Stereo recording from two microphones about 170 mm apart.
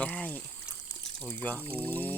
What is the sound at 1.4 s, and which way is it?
Speech, 10° left (ahead or behind).